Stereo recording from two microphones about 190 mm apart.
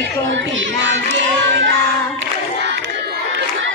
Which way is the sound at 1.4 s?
70° right (ahead or behind).